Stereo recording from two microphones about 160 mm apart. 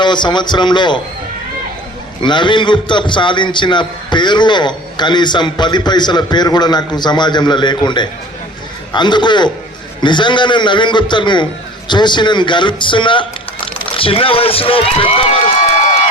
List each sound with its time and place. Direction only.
0.0 s a man's voice: 30° left (ahead or behind)
2.2 s a man's voice: 30° left (ahead or behind)